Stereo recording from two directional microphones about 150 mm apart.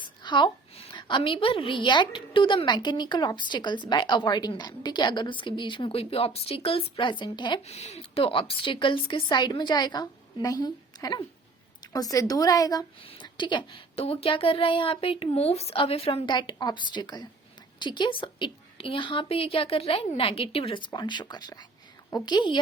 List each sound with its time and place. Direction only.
0.0 s a sound: 30° left (ahead or behind)
0.9 s a woman's voice: 35° left (ahead or behind)
7.7 s a woman's voice: 45° left (ahead or behind); by 22.5 s 30° left (ahead or behind)